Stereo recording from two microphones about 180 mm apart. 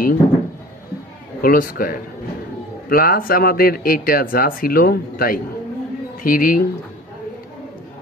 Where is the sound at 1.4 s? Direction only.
50° left (ahead or behind).